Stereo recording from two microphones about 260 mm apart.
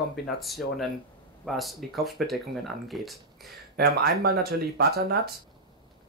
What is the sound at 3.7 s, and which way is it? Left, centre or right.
Speech, right.